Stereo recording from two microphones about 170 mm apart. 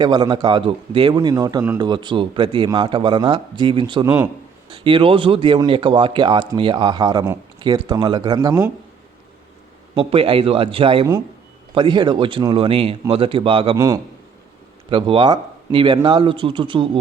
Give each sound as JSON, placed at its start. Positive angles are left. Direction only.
{"t": 0.0, "sound": "a man's voice", "side_deg": -25}
{"t": 9.9, "sound": "a man's voice", "side_deg": -35}
{"t": 13.7, "sound": "a man's voice", "side_deg": -20}
{"t": 14.8, "sound": "a man's voice", "side_deg": -30}